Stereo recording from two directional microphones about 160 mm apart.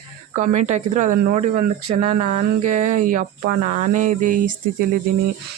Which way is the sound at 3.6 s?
55° right (ahead or behind).